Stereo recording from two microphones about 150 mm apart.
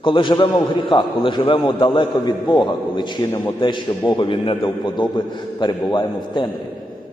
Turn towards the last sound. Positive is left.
turn(degrees=30)  # may be behind; listen again after turning